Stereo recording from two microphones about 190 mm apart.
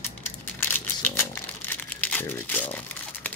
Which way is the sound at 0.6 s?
10° left (ahead or behind).